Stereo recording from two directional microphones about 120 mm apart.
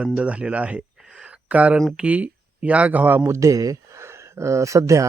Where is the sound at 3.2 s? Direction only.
25° right (ahead or behind).